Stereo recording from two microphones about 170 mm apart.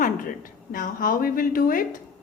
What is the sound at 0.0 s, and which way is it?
A woman's voice, 55° left (ahead or behind).